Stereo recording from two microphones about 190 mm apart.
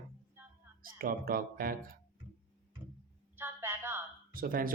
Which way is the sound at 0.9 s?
50° right (ahead or behind).